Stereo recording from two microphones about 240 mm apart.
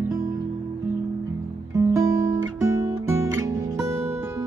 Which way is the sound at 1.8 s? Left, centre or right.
Centre.